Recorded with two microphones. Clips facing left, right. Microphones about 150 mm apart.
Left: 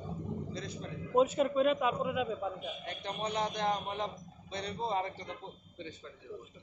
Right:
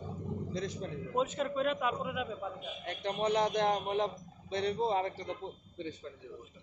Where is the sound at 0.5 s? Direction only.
90° right.